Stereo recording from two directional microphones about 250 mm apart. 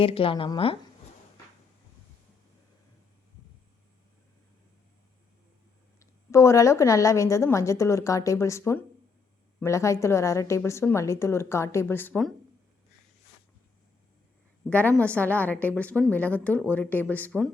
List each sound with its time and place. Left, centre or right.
0.0 s a woman's voice: left
6.0 s a woman's voice: centre
14.7 s a woman's voice: centre